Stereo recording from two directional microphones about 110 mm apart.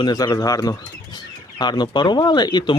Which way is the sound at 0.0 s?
40° left (ahead or behind).